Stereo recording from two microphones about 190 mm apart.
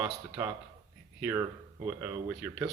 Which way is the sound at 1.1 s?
10° right (ahead or behind).